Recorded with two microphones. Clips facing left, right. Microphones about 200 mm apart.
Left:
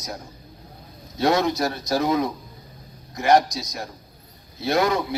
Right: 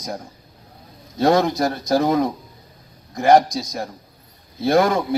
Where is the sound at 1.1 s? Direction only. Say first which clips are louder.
Right 4 dB; 50° right (ahead or behind).